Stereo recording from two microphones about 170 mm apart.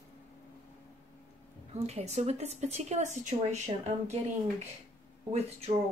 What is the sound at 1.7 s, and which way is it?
A woman's voice, 40° right (ahead or behind).